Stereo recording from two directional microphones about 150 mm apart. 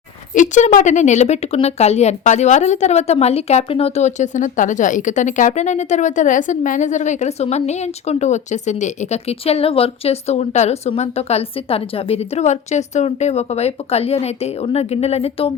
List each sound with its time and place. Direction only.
0.3 s a woman's voice: 55° left (ahead or behind); by 15.5 s 40° left (ahead or behind)